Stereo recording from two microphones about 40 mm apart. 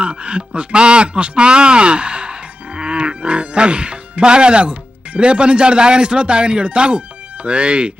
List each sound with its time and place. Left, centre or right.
0.0 s speech: right